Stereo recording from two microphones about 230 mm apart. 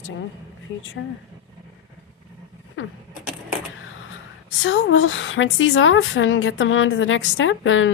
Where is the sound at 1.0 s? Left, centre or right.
Left.